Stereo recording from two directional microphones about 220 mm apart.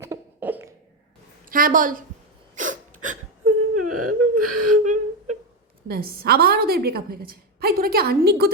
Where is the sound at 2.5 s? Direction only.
35° right (ahead or behind).